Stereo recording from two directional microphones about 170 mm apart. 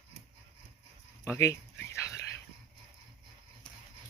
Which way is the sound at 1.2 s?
15° left (ahead or behind).